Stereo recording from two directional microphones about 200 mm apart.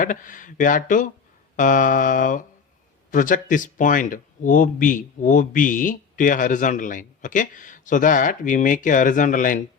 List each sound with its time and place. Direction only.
0.0 s speech: 40° left (ahead or behind)